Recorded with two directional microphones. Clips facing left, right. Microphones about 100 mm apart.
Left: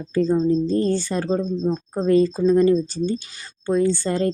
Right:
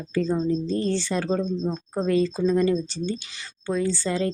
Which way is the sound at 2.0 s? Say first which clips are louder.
Left 5 dB; 40° left (ahead or behind).